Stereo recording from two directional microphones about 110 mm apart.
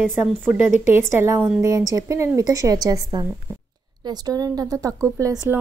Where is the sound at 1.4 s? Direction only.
10° right (ahead or behind).